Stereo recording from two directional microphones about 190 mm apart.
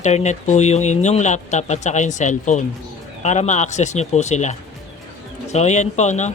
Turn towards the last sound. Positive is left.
turn(degrees=40)  # may be behind; listen again after turning